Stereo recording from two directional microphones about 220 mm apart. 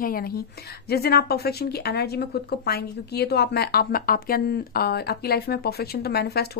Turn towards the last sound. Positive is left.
turn(degrees=45)  # may be behind; listen again after turning